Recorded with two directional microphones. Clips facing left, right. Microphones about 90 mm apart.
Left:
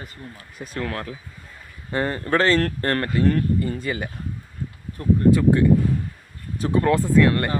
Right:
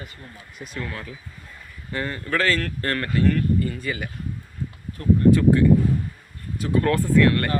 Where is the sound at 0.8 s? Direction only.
55° left (ahead or behind).